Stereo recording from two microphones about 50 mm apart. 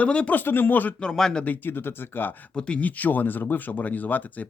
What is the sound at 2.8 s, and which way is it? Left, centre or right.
Speech, left.